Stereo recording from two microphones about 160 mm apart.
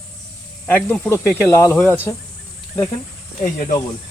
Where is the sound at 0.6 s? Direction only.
10° left (ahead or behind).